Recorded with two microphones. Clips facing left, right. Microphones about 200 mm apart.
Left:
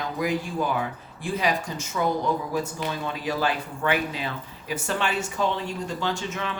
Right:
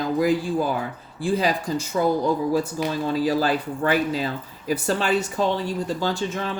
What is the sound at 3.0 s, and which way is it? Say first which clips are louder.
Speech: right 6 dB; 35° right (ahead or behind).